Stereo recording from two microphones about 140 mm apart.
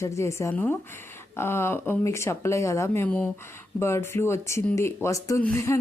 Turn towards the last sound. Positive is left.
turn(degrees=20)  # may be behind; listen again after turning